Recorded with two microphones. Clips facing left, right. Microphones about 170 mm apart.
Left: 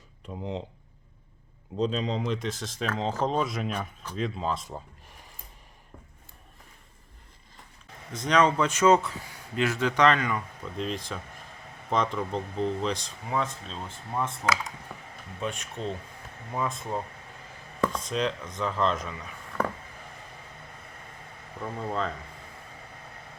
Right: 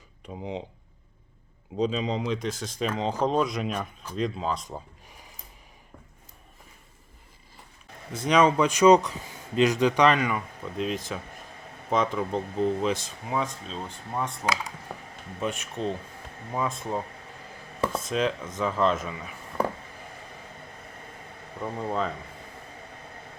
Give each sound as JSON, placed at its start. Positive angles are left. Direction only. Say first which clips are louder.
{"t": 0.3, "sound": "speech", "louder": "even", "side_deg": -5}
{"t": 1.7, "sound": "speech", "louder": "right 1 dB", "side_deg": -5}
{"t": 8.1, "sound": "speech", "louder": "right 2 dB", "side_deg": -10}
{"t": 14.9, "sound": "a sound", "louder": "right 4 dB", "side_deg": -45}
{"t": 15.4, "sound": "speech", "louder": "right 3 dB", "side_deg": 0}
{"t": 21.6, "sound": "speech", "louder": "right 2 dB", "side_deg": -10}